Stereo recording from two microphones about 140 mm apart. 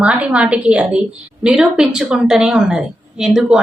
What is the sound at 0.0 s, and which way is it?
A woman's voice, 10° right (ahead or behind).